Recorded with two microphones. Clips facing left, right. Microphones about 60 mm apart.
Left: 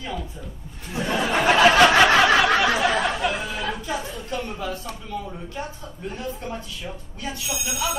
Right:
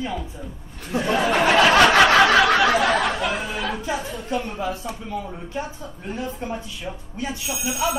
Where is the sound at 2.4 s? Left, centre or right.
Right.